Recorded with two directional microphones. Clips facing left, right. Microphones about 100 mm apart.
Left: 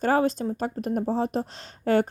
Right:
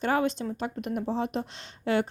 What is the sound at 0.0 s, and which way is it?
Speech, 40° left (ahead or behind).